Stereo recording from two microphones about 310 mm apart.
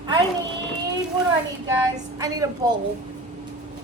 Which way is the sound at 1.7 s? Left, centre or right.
Centre.